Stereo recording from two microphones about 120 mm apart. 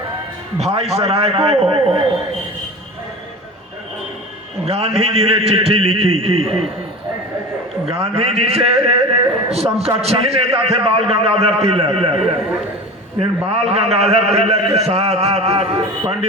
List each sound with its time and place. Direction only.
0.6 s a man's voice: 60° right (ahead or behind)
4.6 s a man's voice: 55° right (ahead or behind)
7.9 s a man's voice: 55° right (ahead or behind)